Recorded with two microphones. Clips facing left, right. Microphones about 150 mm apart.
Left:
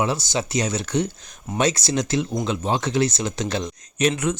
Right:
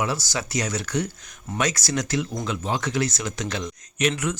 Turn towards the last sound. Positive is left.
turn(degrees=30)  # may be behind; listen again after turning